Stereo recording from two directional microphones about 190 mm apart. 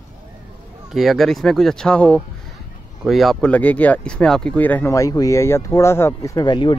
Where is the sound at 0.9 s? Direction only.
Centre (ahead or behind).